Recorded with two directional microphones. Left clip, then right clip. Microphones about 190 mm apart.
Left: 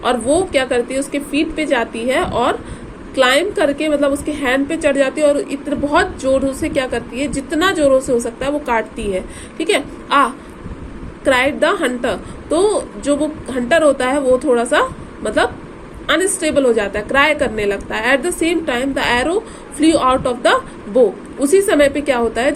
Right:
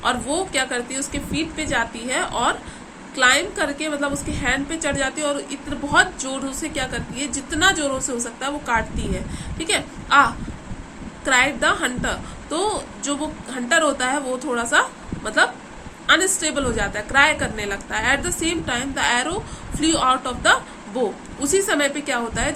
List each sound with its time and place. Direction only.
0.0 s a woman's voice: 15° left (ahead or behind)